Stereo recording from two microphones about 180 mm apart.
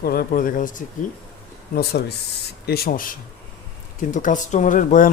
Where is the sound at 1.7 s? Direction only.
65° left (ahead or behind).